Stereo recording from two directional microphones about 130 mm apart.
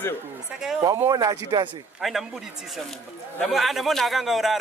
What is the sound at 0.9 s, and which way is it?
Speech, 25° right (ahead or behind).